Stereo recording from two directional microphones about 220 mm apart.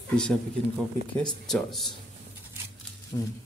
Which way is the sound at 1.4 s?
Centre (ahead or behind).